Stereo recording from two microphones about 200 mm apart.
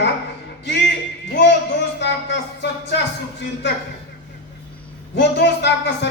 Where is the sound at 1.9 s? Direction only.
60° left (ahead or behind).